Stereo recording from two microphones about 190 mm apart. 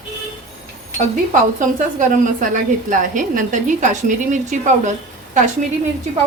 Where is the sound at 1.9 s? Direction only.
45° right (ahead or behind).